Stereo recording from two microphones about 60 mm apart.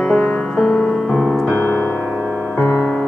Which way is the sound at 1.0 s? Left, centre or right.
Centre.